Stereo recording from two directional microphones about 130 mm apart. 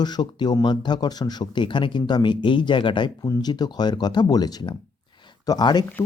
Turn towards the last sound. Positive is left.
turn(degrees=30)  # may be behind; listen again after turning